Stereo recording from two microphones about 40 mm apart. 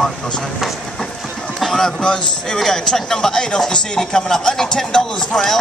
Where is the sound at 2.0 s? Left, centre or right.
Left.